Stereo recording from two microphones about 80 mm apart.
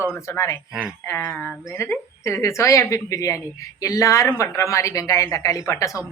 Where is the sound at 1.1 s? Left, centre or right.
Left.